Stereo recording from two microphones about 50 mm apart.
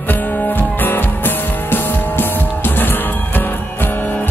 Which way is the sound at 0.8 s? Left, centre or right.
Left.